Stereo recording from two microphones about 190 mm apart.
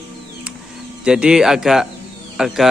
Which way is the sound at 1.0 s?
5° right (ahead or behind).